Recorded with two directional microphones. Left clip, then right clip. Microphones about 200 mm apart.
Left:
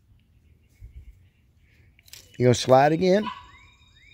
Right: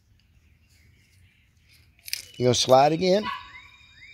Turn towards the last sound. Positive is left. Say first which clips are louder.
# even
turn(degrees=15)  # may be behind; listen again after turning